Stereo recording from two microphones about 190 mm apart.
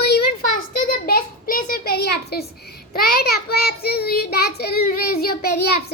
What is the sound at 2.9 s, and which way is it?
Child singing, 55° left (ahead or behind).